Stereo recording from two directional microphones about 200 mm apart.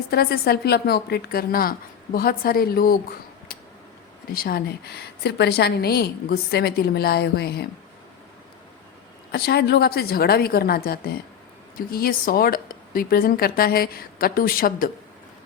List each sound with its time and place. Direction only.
0.1 s a woman's voice: 50° left (ahead or behind)
4.3 s a woman's voice: 45° left (ahead or behind)
9.3 s a woman's voice: 55° left (ahead or behind)